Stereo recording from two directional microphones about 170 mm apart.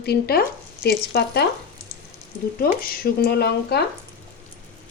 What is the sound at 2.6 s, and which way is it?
Speech, 60° left (ahead or behind).